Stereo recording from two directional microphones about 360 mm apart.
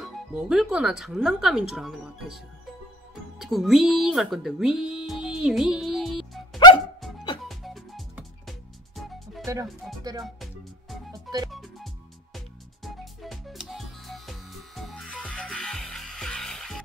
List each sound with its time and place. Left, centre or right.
0.0 s speech: centre
7.4 s music: centre